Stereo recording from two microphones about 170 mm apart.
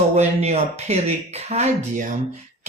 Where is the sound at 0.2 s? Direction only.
40° right (ahead or behind).